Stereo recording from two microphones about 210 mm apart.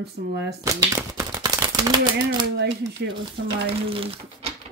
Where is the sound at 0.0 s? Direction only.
50° right (ahead or behind).